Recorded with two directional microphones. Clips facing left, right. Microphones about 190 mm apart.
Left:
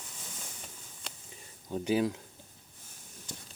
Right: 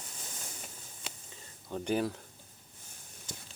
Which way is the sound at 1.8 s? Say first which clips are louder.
Left 3 dB; 10° left (ahead or behind).